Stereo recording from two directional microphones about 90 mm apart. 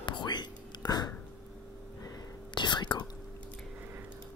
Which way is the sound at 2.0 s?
40° left (ahead or behind).